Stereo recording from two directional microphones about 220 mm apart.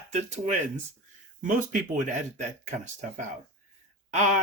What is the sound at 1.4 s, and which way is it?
Speech, 35° right (ahead or behind).